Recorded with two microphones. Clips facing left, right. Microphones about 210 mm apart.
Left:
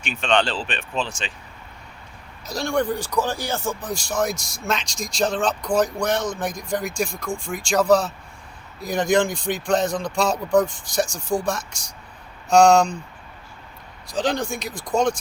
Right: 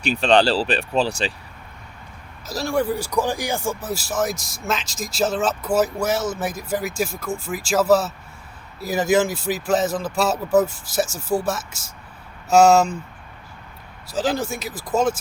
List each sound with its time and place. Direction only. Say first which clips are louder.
0.0 s speech: right 5 dB; 35° right (ahead or behind)
2.5 s speech: right 1 dB; 5° right (ahead or behind)
14.1 s speech: right 1 dB; 5° right (ahead or behind)